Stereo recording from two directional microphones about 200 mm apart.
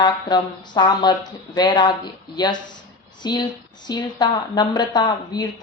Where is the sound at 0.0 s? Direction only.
20° left (ahead or behind).